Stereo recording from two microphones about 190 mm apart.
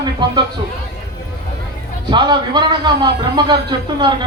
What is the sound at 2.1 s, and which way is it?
A man's voice, 25° right (ahead or behind).